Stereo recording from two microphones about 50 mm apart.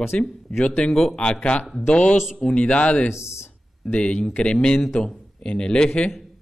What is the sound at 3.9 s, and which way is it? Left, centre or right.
Speech, centre.